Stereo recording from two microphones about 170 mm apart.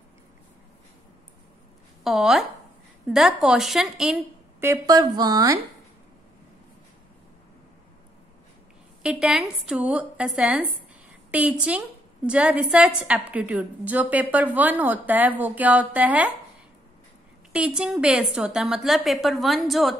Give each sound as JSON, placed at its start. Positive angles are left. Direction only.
{"t": 2.0, "sound": "a woman's voice", "side_deg": -5}
{"t": 4.6, "sound": "a woman's voice", "side_deg": -20}
{"t": 9.0, "sound": "a woman's voice", "side_deg": -5}
{"t": 17.5, "sound": "a woman's voice", "side_deg": -5}